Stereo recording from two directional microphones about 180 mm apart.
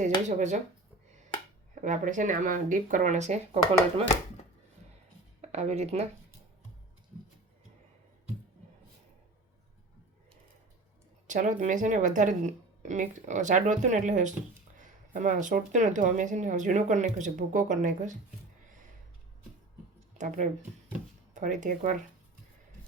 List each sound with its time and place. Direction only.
0.0 s speech: 40° right (ahead or behind)
1.8 s speech: 45° right (ahead or behind)
5.4 s speech: 40° right (ahead or behind)
11.3 s speech: 45° right (ahead or behind)
20.1 s speech: 45° right (ahead or behind)